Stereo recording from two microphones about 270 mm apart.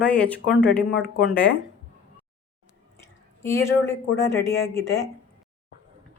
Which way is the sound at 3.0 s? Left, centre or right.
Centre.